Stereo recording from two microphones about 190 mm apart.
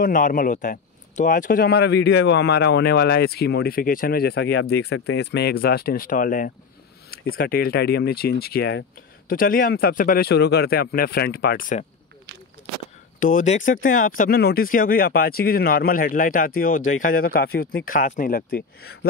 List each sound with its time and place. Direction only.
0.0 s a man's voice: 45° left (ahead or behind)
9.3 s speech: 50° left (ahead or behind)
13.2 s speech: 40° left (ahead or behind)